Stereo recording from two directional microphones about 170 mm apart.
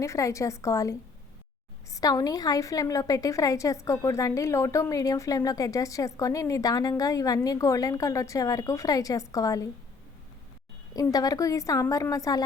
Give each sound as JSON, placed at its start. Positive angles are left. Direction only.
{"t": 0.0, "sound": "a woman's voice", "side_deg": 20}
{"t": 10.9, "sound": "a woman's voice", "side_deg": 20}